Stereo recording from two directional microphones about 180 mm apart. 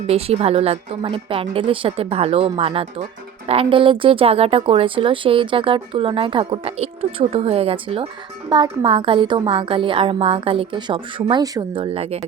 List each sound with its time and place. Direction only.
0.1 s a woman's voice: 35° right (ahead or behind)